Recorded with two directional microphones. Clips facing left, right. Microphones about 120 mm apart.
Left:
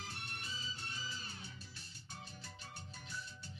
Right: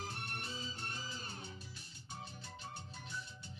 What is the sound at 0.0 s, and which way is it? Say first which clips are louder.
Music: right 4 dB; 50° right (ahead or behind).